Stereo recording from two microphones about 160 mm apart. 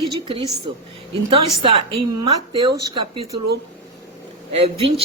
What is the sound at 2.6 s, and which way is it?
Speech, 30° right (ahead or behind).